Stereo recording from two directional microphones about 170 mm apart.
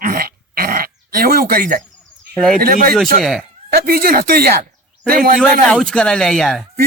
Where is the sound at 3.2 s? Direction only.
Centre (ahead or behind).